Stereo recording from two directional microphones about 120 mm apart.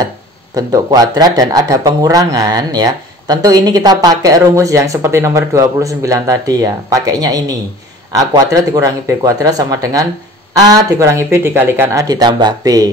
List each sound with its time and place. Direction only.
0.6 s speech: 30° right (ahead or behind)